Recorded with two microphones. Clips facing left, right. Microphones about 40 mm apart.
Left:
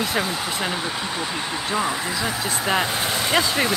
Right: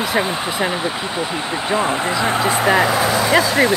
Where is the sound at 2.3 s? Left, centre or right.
Right.